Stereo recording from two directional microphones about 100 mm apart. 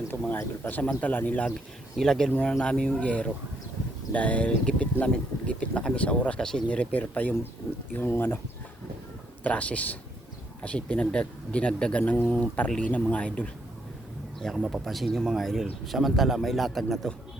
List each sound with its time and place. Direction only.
0.3 s a man's voice: 20° left (ahead or behind)
9.4 s speech: 15° left (ahead or behind)
14.3 s a man's voice: centre (ahead or behind)